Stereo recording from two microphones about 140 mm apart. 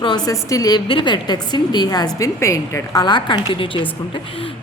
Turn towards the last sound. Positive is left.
turn(degrees=35)  # may be behind; listen again after turning